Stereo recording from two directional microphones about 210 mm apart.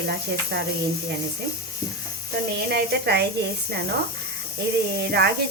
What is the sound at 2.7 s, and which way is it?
Speech, 50° right (ahead or behind).